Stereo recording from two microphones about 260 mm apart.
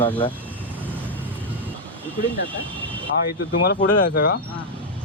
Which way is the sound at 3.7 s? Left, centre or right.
Left.